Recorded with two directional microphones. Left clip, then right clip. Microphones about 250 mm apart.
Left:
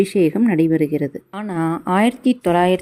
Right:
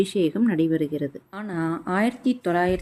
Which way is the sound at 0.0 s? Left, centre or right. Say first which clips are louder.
Left 6 dB; left.